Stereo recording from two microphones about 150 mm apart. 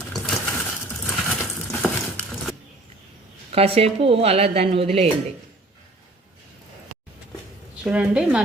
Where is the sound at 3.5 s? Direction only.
40° right (ahead or behind).